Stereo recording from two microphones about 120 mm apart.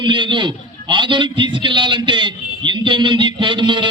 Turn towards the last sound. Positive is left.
turn(degrees=-40)  # may be behind; listen again after turning